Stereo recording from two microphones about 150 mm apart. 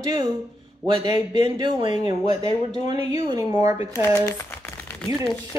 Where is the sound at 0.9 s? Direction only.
45° left (ahead or behind).